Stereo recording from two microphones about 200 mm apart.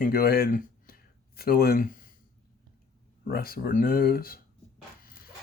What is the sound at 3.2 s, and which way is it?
Speech, 50° left (ahead or behind).